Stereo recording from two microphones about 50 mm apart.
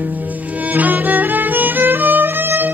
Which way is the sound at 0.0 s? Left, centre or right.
Right.